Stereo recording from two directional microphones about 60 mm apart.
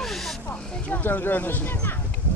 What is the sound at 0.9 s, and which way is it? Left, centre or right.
Speech, left.